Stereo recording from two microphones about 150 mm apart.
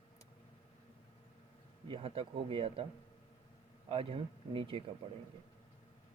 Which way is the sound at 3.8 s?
35° right (ahead or behind).